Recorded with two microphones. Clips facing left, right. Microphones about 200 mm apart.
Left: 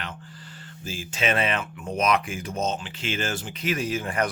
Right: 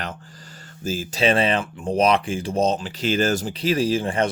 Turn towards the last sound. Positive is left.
turn(degrees=-25)  # may be behind; listen again after turning